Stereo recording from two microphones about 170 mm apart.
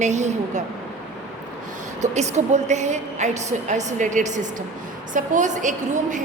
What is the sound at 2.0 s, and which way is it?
A woman's voice, 45° right (ahead or behind).